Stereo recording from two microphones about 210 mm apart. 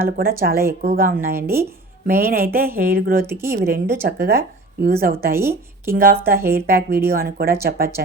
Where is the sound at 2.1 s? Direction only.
45° right (ahead or behind).